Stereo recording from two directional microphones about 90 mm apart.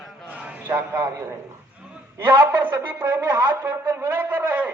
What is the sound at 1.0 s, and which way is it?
Speech, 35° right (ahead or behind).